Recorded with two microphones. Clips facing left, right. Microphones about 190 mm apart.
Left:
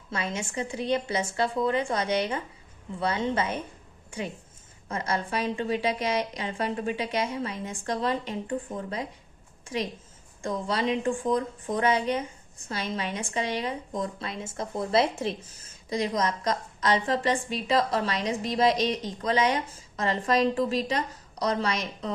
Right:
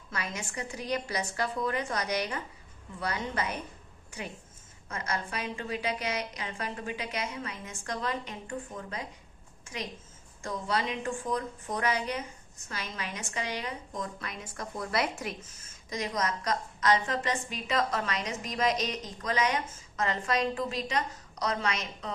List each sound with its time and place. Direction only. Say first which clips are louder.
0.1 s a woman's voice: left 6 dB; 25° left (ahead or behind)
4.9 s a woman's voice: left 6 dB; 30° left (ahead or behind)
10.4 s a woman's voice: left 4 dB; 30° left (ahead or behind)